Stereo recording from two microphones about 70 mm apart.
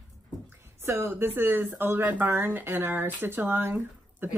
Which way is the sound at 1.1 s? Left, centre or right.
Right.